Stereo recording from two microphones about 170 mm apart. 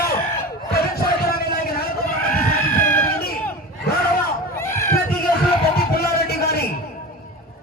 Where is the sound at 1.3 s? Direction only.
60° left (ahead or behind).